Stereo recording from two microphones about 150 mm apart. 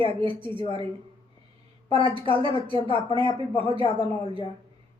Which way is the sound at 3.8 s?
35° left (ahead or behind).